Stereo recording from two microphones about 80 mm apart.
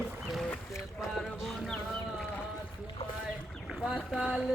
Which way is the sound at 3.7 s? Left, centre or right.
Centre.